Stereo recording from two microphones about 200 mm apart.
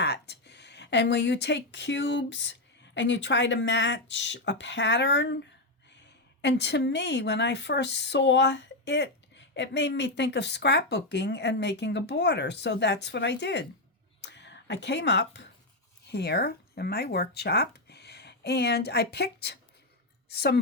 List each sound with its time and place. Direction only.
0.0 s a woman's voice: 60° left (ahead or behind)